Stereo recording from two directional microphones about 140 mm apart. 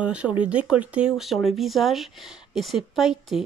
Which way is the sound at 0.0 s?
10° right (ahead or behind).